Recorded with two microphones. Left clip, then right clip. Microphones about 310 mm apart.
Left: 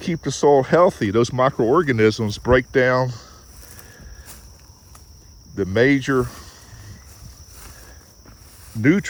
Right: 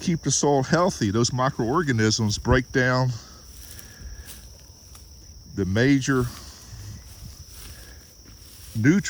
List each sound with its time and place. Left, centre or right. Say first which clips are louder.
0.0 s speech: left 5 dB; right
5.5 s speech: left 5 dB; right
8.8 s speech: left 4 dB; centre